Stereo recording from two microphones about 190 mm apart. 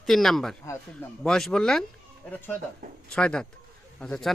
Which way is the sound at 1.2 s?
5° left (ahead or behind).